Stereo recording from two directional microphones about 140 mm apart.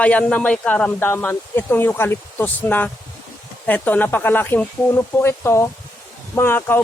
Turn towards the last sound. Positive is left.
turn(degrees=15)  # may be behind; listen again after turning